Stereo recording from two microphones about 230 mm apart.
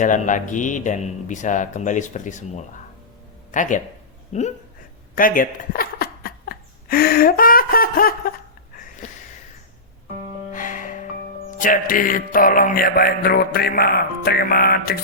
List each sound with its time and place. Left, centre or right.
0.0 s mantra: left
4.3 s speech: left
5.1 s a sound: left
10.5 s music: left
11.6 s mantra: left